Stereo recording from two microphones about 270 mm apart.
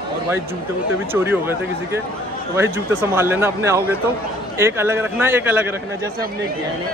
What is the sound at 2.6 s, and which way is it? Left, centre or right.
A man's voice, centre.